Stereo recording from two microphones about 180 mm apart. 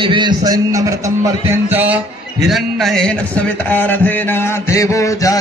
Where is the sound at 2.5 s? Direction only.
Centre (ahead or behind).